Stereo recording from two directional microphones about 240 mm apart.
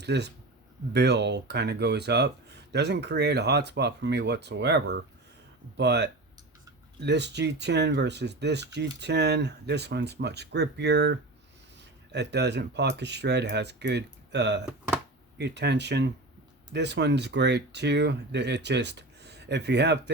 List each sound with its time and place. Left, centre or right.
0.0 s speech: right
14.6 s a sound: centre
15.4 s speech: right